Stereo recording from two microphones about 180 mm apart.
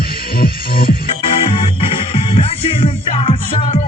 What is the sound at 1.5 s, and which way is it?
Music, 30° left (ahead or behind).